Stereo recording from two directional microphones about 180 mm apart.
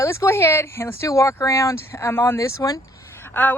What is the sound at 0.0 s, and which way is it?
Speech, 15° left (ahead or behind).